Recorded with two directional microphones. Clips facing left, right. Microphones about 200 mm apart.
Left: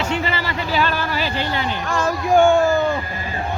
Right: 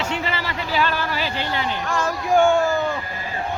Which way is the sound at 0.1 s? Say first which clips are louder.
Left 3 dB; 40° left (ahead or behind).